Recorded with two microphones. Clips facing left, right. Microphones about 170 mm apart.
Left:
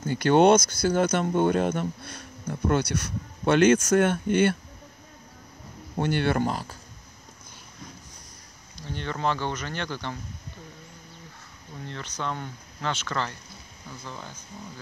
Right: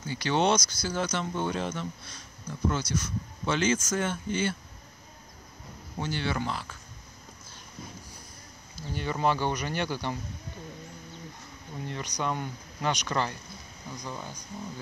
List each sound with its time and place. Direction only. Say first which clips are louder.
0.0 s speech: left 8 dB; 55° left (ahead or behind)
5.9 s speech: left 7 dB; 60° left (ahead or behind); by 6.8 s 40° left (ahead or behind)
8.7 s speech: even; 10° right (ahead or behind)
11.8 s speech: right 1 dB; 15° right (ahead or behind)